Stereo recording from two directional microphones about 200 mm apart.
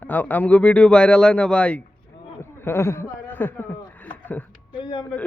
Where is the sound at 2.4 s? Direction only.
10° left (ahead or behind).